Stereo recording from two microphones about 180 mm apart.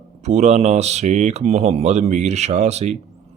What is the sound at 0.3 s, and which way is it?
Speech, 40° right (ahead or behind).